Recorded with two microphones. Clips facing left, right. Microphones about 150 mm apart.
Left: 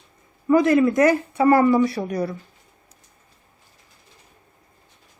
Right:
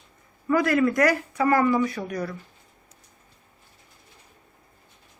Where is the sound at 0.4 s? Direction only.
20° left (ahead or behind).